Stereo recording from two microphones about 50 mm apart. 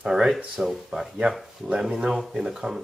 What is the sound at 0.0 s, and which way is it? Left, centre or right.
Speech, centre.